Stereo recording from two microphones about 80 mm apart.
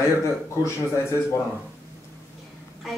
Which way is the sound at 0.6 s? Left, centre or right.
Left.